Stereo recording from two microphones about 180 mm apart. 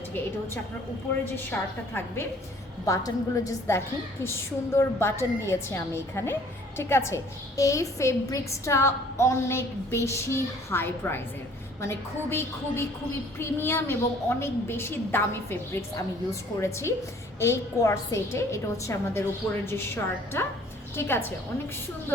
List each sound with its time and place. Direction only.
1.2 s a woman's voice: 10° left (ahead or behind)
20.9 s a woman's voice: 15° left (ahead or behind)